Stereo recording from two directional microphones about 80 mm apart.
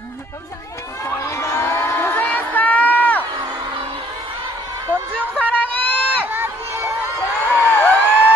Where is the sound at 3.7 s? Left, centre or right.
Right.